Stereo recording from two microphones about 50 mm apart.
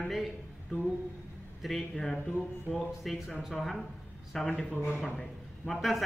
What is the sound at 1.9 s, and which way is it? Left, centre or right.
Speech, centre.